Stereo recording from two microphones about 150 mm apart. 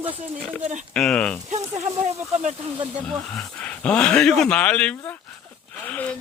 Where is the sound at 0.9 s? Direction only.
5° left (ahead or behind).